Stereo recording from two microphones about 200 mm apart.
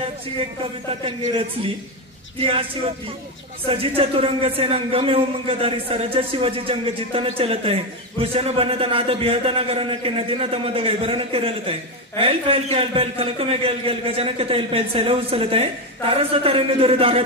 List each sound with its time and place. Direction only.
0.8 s speech: 25° right (ahead or behind)
3.6 s speech: 30° right (ahead or behind)